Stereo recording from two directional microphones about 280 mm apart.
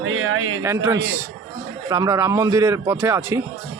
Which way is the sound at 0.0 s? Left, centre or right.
Right.